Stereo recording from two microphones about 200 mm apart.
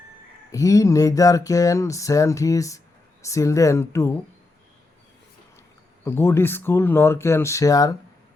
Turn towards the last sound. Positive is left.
turn(degrees=20)  # may be behind; listen again after turning